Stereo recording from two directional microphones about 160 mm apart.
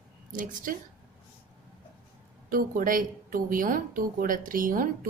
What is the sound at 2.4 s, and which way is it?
A woman's voice, 60° right (ahead or behind).